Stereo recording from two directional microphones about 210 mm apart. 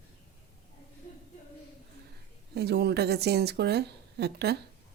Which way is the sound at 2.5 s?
50° right (ahead or behind).